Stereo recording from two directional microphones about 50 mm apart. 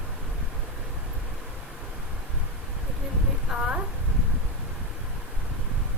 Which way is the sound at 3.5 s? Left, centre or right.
Centre.